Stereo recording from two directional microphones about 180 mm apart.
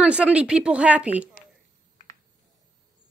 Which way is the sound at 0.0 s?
5° right (ahead or behind).